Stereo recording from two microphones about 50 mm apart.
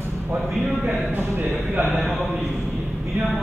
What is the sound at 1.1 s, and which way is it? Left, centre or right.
Speech, right.